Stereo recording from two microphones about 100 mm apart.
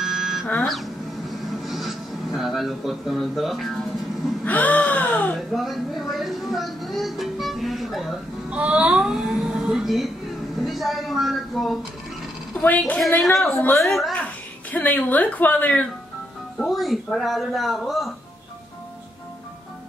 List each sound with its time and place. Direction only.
0.0 s a sound: centre (ahead or behind)
1.4 s music: centre (ahead or behind)
4.5 s gasp: 15° left (ahead or behind)
5.5 s speech: centre (ahead or behind)
8.5 s speech: 10° right (ahead or behind)
12.6 s a woman's voice: 15° left (ahead or behind)
13.2 s speech: centre (ahead or behind)
14.1 s a child's voice: 15° left (ahead or behind)
16.5 s speech: centre (ahead or behind)